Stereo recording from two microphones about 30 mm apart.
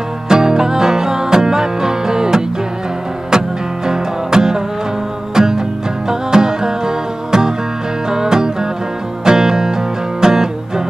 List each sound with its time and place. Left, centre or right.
0.3 s music: right